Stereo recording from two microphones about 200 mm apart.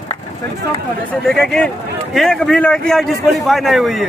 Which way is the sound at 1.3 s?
5° left (ahead or behind).